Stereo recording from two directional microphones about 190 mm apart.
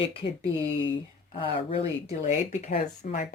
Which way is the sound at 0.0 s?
30° left (ahead or behind).